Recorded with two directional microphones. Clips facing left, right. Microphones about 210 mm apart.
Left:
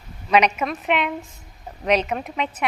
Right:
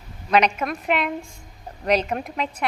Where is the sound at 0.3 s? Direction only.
10° left (ahead or behind).